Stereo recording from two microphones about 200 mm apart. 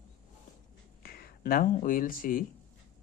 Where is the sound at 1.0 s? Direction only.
50° left (ahead or behind).